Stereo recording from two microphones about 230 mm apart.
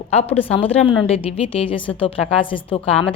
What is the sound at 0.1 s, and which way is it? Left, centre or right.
A woman's voice, left.